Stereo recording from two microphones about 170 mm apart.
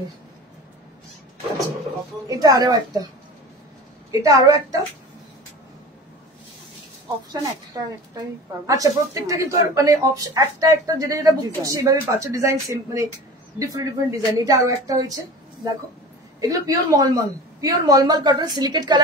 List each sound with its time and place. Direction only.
2.2 s a woman's voice: 20° right (ahead or behind)
4.1 s a woman's voice: 20° right (ahead or behind)
7.2 s a woman's voice: 20° right (ahead or behind)
16.3 s a woman's voice: 20° right (ahead or behind)